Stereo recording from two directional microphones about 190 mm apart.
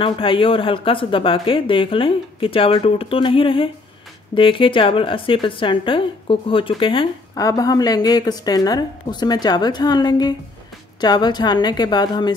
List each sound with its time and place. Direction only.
0.0 s speech: 25° left (ahead or behind)